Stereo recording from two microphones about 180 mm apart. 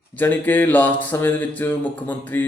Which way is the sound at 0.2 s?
10° left (ahead or behind).